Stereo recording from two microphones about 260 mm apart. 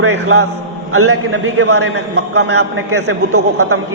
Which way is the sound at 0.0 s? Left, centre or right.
Right.